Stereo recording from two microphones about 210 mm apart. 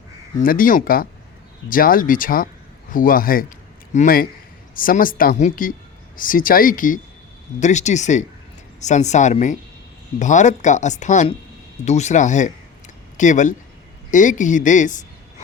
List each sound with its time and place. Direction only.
0.3 s speech: 40° left (ahead or behind)